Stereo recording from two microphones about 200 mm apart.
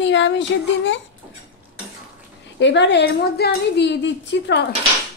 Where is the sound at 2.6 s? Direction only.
60° left (ahead or behind).